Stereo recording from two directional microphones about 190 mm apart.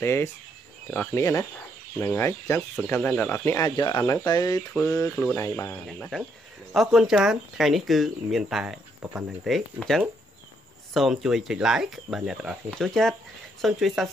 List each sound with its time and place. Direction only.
0.0 s speech: 15° left (ahead or behind)
5.9 s speech: centre (ahead or behind)